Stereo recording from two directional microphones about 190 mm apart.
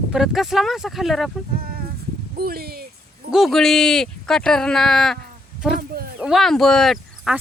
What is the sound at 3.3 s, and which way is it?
Speech, centre (ahead or behind).